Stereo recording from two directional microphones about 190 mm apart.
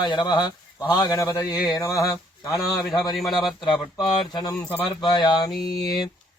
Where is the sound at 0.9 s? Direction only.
20° left (ahead or behind).